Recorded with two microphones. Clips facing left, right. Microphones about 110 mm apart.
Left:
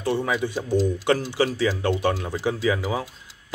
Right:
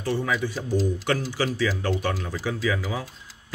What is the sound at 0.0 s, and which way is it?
Speech, 20° left (ahead or behind).